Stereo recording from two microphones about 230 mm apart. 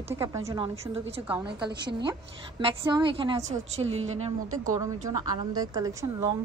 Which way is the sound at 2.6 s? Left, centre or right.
Right.